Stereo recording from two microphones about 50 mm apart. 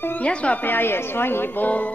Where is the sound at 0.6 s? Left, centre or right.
Left.